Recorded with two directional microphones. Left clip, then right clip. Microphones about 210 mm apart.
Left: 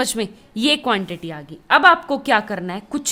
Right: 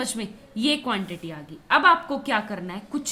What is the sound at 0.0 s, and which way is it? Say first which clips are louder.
A woman's voice: left 9 dB; 50° left (ahead or behind).